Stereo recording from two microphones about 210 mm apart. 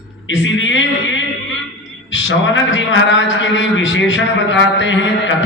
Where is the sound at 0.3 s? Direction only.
65° left (ahead or behind).